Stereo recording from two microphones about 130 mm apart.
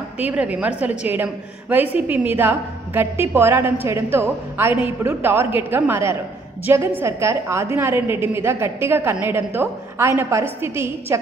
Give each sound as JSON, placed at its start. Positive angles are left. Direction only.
{"t": 0.2, "sound": "a woman's voice", "side_deg": -10}